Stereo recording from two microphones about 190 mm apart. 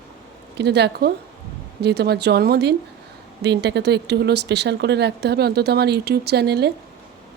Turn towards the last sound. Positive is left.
turn(degrees=-60)  # may be behind; listen again after turning